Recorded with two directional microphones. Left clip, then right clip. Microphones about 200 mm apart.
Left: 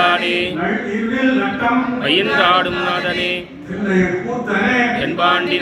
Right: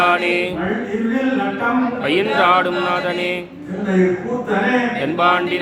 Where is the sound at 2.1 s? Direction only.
20° right (ahead or behind).